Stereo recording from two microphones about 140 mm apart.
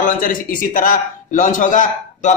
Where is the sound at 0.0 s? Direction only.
75° left (ahead or behind).